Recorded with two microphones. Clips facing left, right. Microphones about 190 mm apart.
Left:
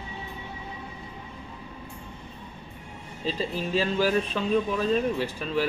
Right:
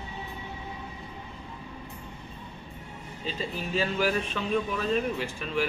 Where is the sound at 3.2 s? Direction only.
35° left (ahead or behind).